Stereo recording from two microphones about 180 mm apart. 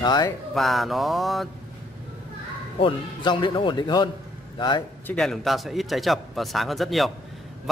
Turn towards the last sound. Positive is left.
turn(degrees=0)  # may be behind; listen again after turning